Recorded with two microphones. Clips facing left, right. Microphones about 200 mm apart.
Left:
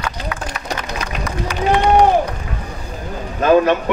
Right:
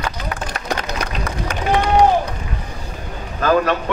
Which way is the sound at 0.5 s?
55° right (ahead or behind).